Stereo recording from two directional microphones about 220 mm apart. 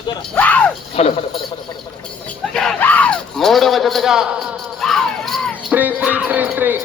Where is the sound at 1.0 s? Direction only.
25° left (ahead or behind).